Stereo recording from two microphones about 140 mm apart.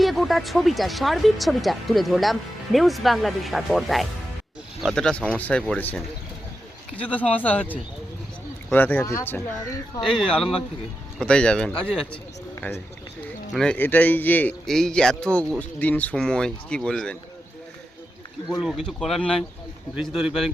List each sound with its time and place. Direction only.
0.0 s speech: centre (ahead or behind); by 9.4 s 15° left (ahead or behind)
10.0 s speech: 5° left (ahead or behind)
18.6 s speech: centre (ahead or behind)